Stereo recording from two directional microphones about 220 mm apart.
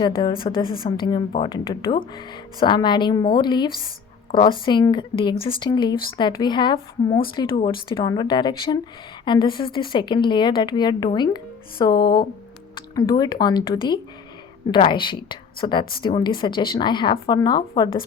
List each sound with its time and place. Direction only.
0.0 s a woman's voice: 20° left (ahead or behind)